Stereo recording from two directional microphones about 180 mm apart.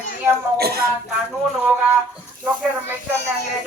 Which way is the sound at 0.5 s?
60° right (ahead or behind).